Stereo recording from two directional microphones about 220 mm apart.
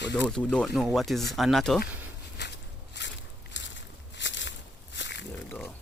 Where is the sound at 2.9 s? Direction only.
55° left (ahead or behind).